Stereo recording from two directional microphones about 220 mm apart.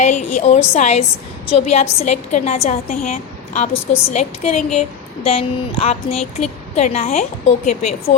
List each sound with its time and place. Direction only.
0.1 s a woman's voice: 35° left (ahead or behind)